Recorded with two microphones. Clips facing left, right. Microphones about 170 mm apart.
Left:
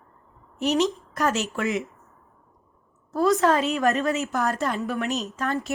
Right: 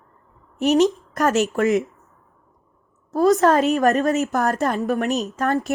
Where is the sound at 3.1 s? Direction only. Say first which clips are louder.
Right 4 dB; 40° right (ahead or behind).